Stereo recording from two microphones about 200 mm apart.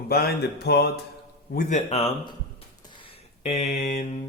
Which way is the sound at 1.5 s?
35° left (ahead or behind).